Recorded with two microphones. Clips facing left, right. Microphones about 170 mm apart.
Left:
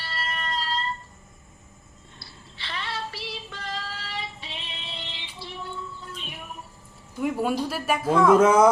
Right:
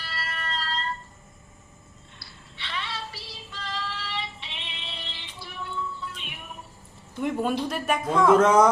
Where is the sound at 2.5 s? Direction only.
35° left (ahead or behind).